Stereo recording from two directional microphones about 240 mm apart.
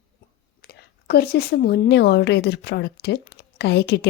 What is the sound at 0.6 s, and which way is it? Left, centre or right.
A woman's voice, left.